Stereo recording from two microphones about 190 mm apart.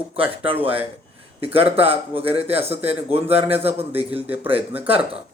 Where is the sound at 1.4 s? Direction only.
30° right (ahead or behind).